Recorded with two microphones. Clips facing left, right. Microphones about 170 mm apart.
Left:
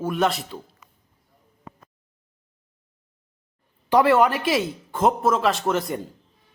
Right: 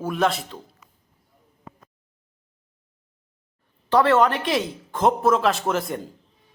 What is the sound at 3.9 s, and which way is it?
A man's voice, 10° left (ahead or behind).